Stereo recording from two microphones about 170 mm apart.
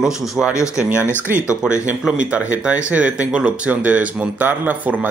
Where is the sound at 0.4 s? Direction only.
5° left (ahead or behind).